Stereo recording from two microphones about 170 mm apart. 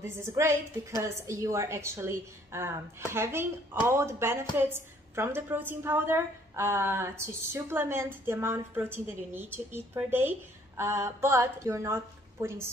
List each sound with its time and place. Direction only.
0.2 s a woman's voice: 15° right (ahead or behind)